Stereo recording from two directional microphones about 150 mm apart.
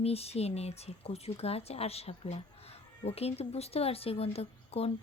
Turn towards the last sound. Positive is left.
turn(degrees=40)  # may be behind; listen again after turning